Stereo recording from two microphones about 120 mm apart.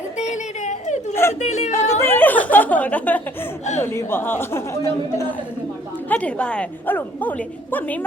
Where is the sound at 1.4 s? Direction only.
70° left (ahead or behind).